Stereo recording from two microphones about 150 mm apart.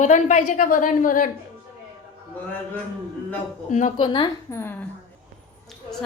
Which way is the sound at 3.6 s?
55° left (ahead or behind).